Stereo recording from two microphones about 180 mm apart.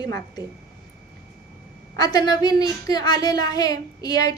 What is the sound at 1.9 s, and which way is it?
A woman's voice, 20° left (ahead or behind).